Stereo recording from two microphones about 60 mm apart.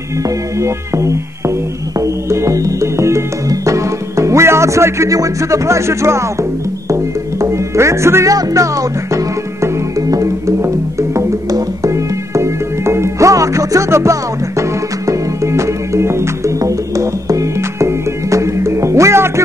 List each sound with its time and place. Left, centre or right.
0.2 s music: right
5.1 s music: right
8.3 s music: right
16.5 s music: right